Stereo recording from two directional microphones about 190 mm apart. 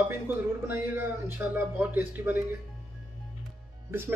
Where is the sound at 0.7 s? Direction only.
10° right (ahead or behind).